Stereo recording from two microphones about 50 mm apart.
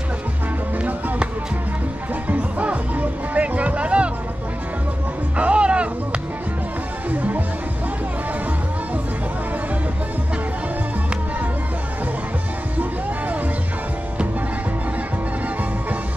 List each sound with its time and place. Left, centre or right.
2.2 s music: right
5.4 s music: right
7.1 s music: right